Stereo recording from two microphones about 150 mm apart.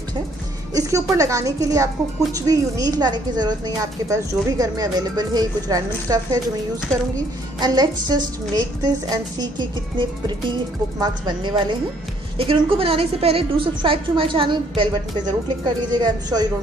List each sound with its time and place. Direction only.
0.7 s a woman's voice: 20° right (ahead or behind)
7.6 s a woman's voice: 25° right (ahead or behind)